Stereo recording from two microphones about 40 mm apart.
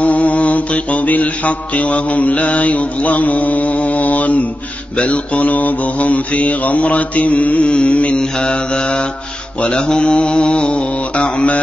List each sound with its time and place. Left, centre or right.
0.0 s mantra: left
7.6 s mantra: left